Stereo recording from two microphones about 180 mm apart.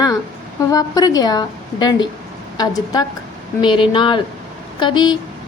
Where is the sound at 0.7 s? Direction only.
20° left (ahead or behind).